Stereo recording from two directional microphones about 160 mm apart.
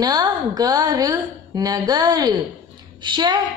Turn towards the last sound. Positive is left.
turn(degrees=-30)  # may be behind; listen again after turning